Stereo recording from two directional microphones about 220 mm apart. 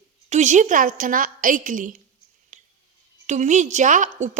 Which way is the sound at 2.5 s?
35° right (ahead or behind).